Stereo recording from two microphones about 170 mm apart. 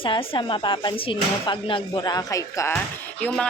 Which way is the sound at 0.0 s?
30° left (ahead or behind).